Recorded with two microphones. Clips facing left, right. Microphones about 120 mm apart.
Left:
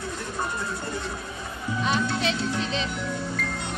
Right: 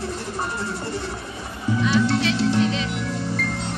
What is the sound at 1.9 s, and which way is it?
Music, 80° right.